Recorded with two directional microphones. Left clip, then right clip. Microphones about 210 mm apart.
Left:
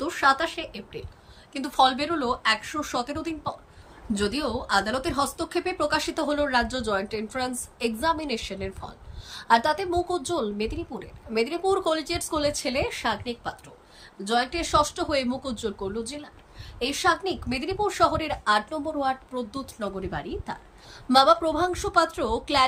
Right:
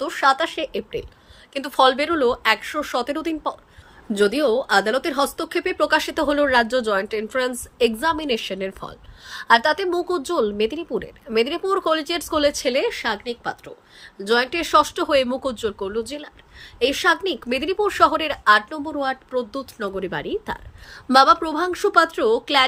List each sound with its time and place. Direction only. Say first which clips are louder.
0.0 s a woman's voice: right 4 dB; 20° right (ahead or behind)